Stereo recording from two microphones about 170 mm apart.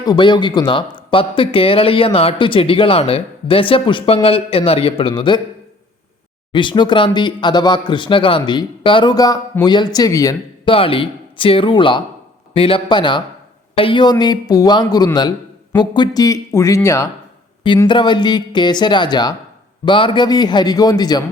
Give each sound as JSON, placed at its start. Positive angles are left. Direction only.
{"t": 0.0, "sound": "speech", "side_deg": 25}
{"t": 6.5, "sound": "speech", "side_deg": 25}
{"t": 10.7, "sound": "speech", "side_deg": 30}